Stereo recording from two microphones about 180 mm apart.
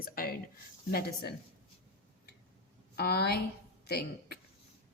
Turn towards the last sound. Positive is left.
turn(degrees=60)  # may be behind; listen again after turning